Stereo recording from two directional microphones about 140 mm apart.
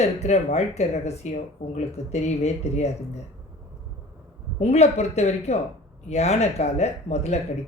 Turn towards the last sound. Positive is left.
turn(degrees=50)  # may be behind; listen again after turning